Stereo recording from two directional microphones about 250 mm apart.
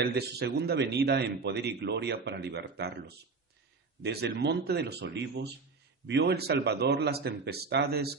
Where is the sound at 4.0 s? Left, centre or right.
Right.